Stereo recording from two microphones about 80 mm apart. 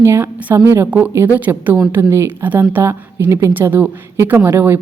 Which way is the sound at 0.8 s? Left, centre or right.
Centre.